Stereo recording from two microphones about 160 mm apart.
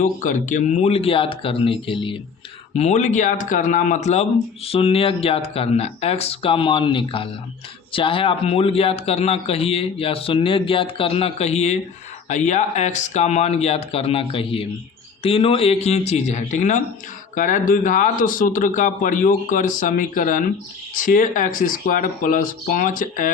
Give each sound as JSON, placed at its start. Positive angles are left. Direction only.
{"t": 0.0, "sound": "speech", "side_deg": 50}
{"t": 2.7, "sound": "a man's voice", "side_deg": 45}